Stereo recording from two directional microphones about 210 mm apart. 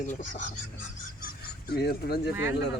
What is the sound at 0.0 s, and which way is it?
Speech, 35° left (ahead or behind).